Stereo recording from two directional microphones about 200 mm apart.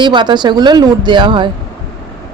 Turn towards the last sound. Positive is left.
turn(degrees=-25)  # may be behind; listen again after turning